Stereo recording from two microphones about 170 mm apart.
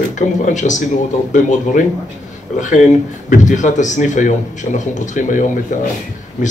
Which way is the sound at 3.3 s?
45° left (ahead or behind).